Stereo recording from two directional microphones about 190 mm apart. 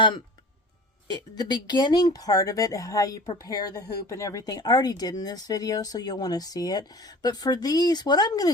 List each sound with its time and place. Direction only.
1.0 s speech: 20° left (ahead or behind)